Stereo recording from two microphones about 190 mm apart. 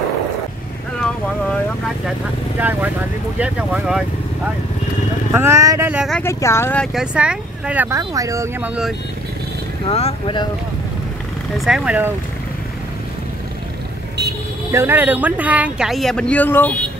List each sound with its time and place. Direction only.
3.3 s speech: 5° right (ahead or behind)
5.3 s speech: 15° right (ahead or behind)
6.2 s speech: 15° left (ahead or behind); by 8.9 s 5° right (ahead or behind)
9.8 s speech: 30° left (ahead or behind)
11.5 s speech: centre (ahead or behind)
14.7 s speech: 10° right (ahead or behind); by 16.7 s 10° left (ahead or behind)